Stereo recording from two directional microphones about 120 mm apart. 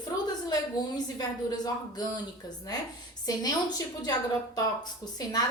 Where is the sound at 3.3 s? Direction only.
30° left (ahead or behind).